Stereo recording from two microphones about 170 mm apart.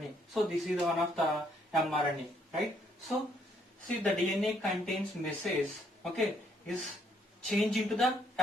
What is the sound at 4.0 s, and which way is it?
Speech, centre (ahead or behind).